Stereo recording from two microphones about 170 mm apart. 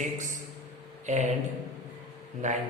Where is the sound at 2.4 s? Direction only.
45° right (ahead or behind).